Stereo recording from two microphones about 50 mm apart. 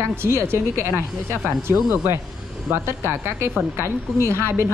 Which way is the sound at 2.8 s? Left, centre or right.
Right.